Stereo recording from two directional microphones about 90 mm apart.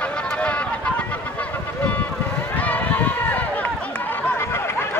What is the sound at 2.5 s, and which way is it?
Run, 20° left (ahead or behind).